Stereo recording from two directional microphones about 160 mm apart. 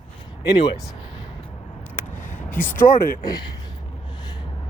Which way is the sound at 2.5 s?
10° left (ahead or behind).